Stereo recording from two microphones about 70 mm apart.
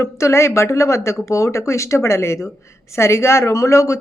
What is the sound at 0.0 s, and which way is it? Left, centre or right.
Speech, left.